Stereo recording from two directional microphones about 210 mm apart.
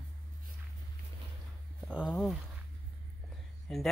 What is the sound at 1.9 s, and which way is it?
Speech, centre (ahead or behind).